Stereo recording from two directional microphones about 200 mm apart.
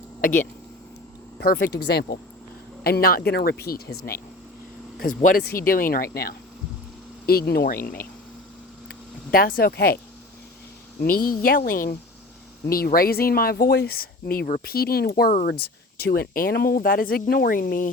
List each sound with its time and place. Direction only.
0.2 s speech: 40° left (ahead or behind)
1.5 s speech: 10° left (ahead or behind)
1.8 s speech: 50° left (ahead or behind)
4.9 s speech: 45° left (ahead or behind)
8.9 s speech: 45° left (ahead or behind)
11.0 s speech: 45° left (ahead or behind)